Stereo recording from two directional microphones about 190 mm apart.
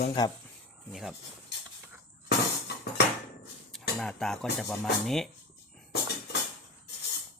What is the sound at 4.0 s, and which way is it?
Speech, centre (ahead or behind).